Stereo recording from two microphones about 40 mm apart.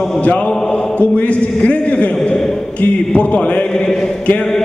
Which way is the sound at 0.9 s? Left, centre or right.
Left.